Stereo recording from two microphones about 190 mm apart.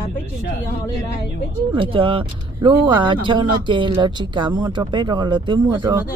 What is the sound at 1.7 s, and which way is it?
Speech, 30° right (ahead or behind).